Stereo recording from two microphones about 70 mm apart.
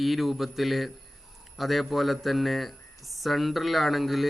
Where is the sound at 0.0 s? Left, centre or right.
Centre.